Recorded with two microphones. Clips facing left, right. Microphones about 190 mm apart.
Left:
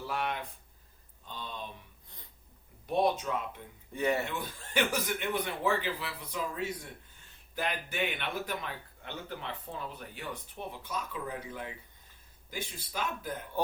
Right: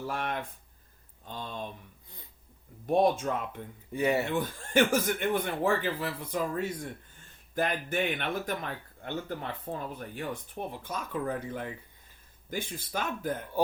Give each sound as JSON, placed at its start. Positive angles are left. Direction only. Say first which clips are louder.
{"t": 0.1, "sound": "speech", "louder": "left 2 dB", "side_deg": -45}
{"t": 1.4, "sound": "a sound", "louder": "right 4 dB", "side_deg": -45}
{"t": 2.8, "sound": "speech", "louder": "right 4 dB", "side_deg": -45}
{"t": 3.9, "sound": "speech", "louder": "right 3 dB", "side_deg": -10}
{"t": 4.3, "sound": "speech", "louder": "right 8 dB", "side_deg": -50}